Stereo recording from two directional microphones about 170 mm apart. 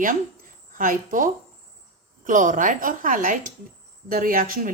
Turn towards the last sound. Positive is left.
turn(degrees=-55)  # may be behind; listen again after turning